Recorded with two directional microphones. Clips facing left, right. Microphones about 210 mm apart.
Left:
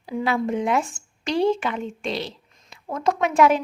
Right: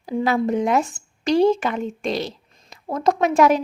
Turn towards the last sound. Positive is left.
turn(degrees=-40)  # may be behind; listen again after turning